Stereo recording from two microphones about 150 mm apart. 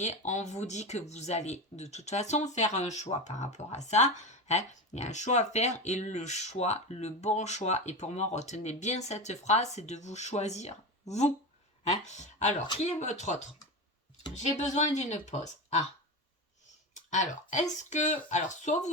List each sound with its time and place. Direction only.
0.0 s speech: 50° left (ahead or behind)
12.0 s speech: 50° left (ahead or behind)
14.8 s speech: 50° left (ahead or behind)
16.9 s speech: 55° left (ahead or behind)